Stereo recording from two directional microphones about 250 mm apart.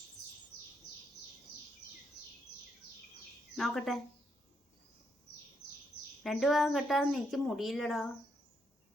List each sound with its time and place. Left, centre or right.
3.5 s speech: centre
6.2 s speech: centre